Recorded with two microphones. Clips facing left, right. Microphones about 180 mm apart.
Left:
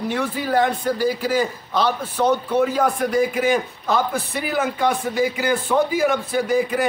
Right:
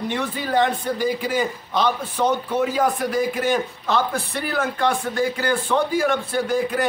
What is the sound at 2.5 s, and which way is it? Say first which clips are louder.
A man's voice: left 2 dB; 5° right (ahead or behind).